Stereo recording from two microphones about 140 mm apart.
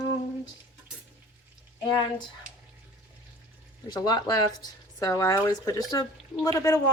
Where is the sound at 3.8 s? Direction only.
30° left (ahead or behind).